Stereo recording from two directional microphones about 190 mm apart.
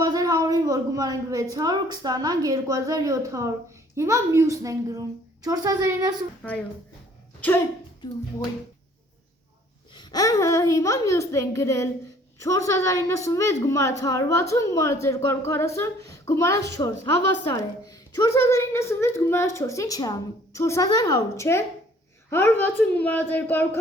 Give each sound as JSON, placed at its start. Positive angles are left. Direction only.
{"t": 0.0, "sound": "a sound", "side_deg": -20}
{"t": 1.5, "sound": "a woman's voice", "side_deg": -20}
{"t": 6.4, "sound": "a woman's voice", "side_deg": 5}
{"t": 9.9, "sound": "a woman's voice", "side_deg": 20}